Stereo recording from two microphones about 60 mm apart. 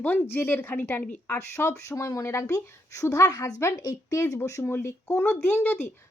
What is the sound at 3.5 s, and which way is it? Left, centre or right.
Speech, left.